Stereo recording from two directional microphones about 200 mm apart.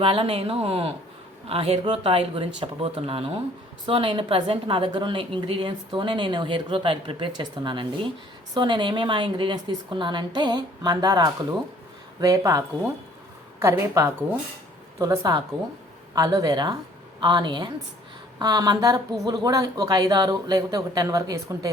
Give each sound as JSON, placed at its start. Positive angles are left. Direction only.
{"t": 0.0, "sound": "a woman's voice", "side_deg": -30}